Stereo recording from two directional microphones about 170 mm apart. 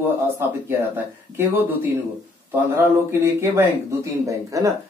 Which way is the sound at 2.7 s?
15° right (ahead or behind).